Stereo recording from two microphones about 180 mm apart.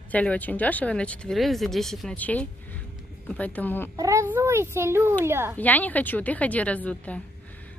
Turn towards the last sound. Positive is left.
turn(degrees=10)  # may be behind; listen again after turning